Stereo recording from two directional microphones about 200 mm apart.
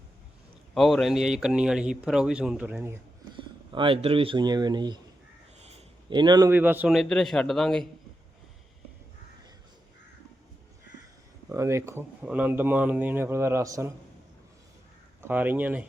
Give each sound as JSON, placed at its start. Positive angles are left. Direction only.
{"t": 0.7, "sound": "speech", "side_deg": 0}
{"t": 3.3, "sound": "a man's voice", "side_deg": -25}
{"t": 11.4, "sound": "speech", "side_deg": -15}
{"t": 15.2, "sound": "speech", "side_deg": -10}